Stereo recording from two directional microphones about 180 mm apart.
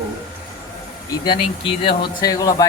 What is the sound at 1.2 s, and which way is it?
Speech, 30° left (ahead or behind).